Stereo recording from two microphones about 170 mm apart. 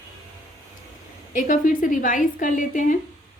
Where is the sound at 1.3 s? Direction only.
50° left (ahead or behind).